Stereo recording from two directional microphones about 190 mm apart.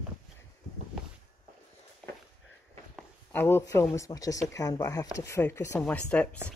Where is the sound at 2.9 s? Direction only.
10° left (ahead or behind).